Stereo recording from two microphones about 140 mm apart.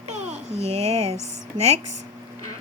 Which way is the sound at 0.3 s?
50° right (ahead or behind).